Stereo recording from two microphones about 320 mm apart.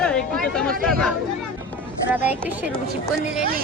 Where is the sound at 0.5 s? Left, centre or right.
Centre.